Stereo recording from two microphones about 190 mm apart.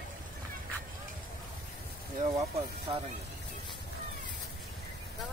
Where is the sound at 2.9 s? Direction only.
25° right (ahead or behind).